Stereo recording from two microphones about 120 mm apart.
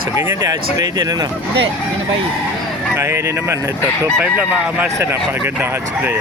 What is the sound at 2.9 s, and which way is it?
Speech, 25° right (ahead or behind).